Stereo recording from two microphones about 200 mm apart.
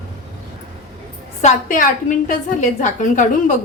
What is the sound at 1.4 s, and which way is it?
A woman's voice, 40° left (ahead or behind).